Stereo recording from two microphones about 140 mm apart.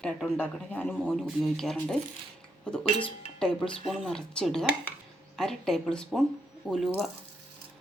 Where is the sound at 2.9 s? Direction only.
40° left (ahead or behind).